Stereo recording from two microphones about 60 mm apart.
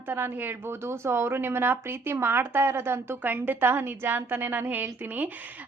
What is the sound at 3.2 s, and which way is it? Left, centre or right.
A woman's voice, right.